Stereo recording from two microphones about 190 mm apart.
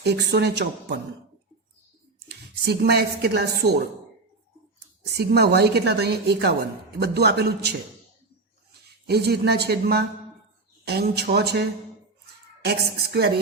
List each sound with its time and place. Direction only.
0.0 s a woman's voice: 60° right (ahead or behind)
2.3 s a woman's voice: 60° right (ahead or behind)
5.0 s a woman's voice: 60° right (ahead or behind)
9.0 s a woman's voice: 60° right (ahead or behind)
12.6 s a woman's voice: 55° right (ahead or behind)